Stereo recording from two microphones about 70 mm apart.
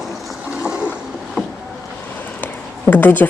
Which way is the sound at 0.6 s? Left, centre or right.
Centre.